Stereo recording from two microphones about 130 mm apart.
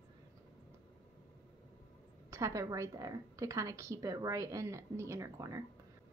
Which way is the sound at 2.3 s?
25° right (ahead or behind).